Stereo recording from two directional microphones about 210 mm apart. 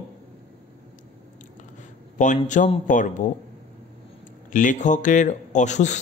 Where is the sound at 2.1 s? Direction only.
35° left (ahead or behind).